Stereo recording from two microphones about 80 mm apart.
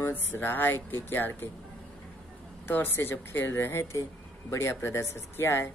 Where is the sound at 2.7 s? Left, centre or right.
Left.